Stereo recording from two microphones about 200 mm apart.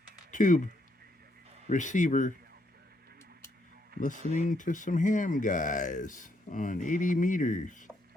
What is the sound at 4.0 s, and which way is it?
Speech, 40° left (ahead or behind).